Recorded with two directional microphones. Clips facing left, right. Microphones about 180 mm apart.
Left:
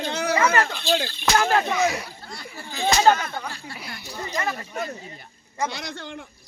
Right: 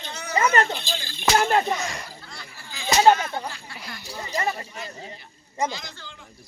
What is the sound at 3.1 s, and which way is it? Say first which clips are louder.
Speech: right 4 dB; 20° right (ahead or behind).